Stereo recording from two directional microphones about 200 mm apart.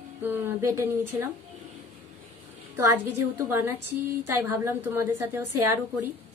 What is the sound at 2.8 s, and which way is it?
Speech, 15° right (ahead or behind).